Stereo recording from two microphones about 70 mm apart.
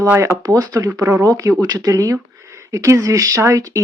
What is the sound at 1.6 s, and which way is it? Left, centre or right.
Speech, right.